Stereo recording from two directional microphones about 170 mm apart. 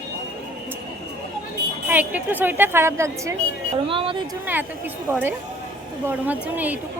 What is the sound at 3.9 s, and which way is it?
Speech, 30° right (ahead or behind).